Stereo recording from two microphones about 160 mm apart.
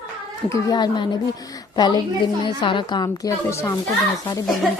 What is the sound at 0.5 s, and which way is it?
A woman's voice, 25° left (ahead or behind).